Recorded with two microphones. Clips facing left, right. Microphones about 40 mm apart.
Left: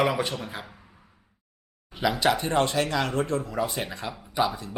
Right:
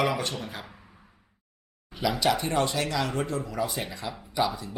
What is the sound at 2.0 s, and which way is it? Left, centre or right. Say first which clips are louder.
Speech: left 2 dB; left.